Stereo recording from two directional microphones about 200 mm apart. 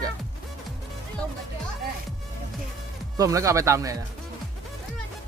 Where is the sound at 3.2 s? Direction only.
15° right (ahead or behind).